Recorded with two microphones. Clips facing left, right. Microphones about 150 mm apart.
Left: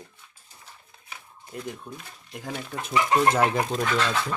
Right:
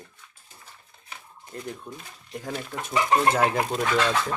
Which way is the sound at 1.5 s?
10° left (ahead or behind).